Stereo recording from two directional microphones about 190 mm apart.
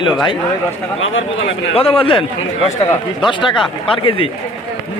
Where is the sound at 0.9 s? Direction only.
90° left.